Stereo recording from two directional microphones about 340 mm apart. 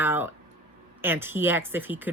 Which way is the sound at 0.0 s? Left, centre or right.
Centre.